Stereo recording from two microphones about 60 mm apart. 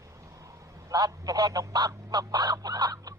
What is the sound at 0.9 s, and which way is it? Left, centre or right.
Goose, right.